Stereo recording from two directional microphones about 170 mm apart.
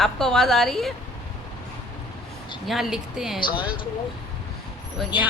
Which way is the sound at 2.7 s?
Centre (ahead or behind).